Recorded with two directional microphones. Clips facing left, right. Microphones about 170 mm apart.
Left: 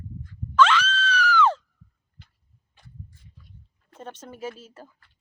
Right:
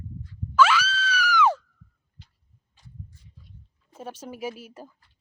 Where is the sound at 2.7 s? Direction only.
60° left (ahead or behind).